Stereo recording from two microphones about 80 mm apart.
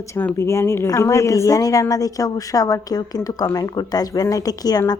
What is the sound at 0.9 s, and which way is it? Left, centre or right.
A woman's voice, left.